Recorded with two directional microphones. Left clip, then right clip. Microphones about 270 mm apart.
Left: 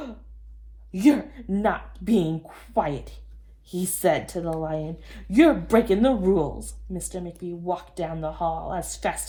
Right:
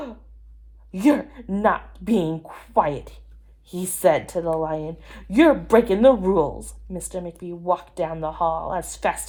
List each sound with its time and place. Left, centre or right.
0.9 s speech: right